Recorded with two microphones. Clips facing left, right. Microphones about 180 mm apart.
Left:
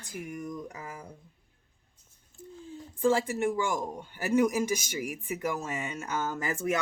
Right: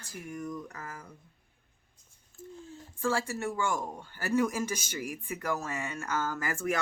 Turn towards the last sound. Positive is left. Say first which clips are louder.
# left 1 dB
turn(degrees=20)  # may be behind; listen again after turning